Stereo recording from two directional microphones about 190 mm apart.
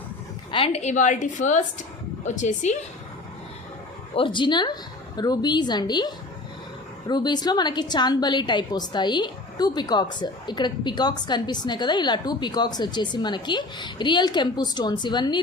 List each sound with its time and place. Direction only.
0.5 s a woman's voice: 30° left (ahead or behind)
4.1 s a woman's voice: 25° left (ahead or behind)